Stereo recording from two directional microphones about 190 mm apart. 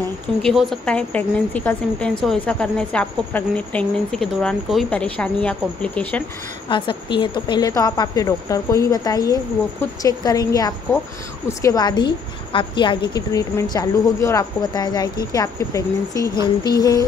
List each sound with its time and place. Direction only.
0.4 s a woman's voice: centre (ahead or behind)
6.7 s a woman's voice: 25° left (ahead or behind)